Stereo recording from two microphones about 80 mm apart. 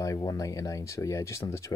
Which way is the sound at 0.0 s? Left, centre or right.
Left.